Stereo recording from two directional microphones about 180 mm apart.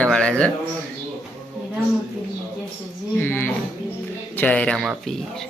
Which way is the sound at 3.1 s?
10° left (ahead or behind).